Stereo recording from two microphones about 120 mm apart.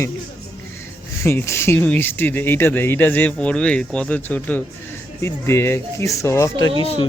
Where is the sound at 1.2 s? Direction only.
20° left (ahead or behind).